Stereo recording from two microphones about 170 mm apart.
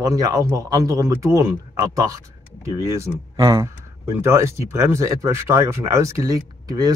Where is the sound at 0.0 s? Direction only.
20° right (ahead or behind).